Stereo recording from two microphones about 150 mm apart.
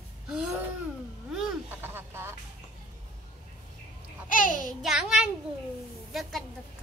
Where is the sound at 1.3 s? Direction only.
5° right (ahead or behind).